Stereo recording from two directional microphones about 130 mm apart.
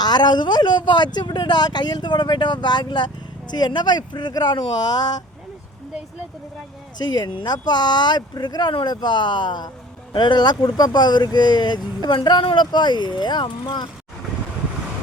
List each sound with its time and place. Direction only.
0.0 s speech: 35° left (ahead or behind)
7.0 s speech: 35° left (ahead or behind)